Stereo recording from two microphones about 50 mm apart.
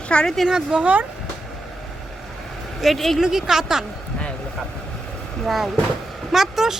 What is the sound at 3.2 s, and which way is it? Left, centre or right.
Speech, centre.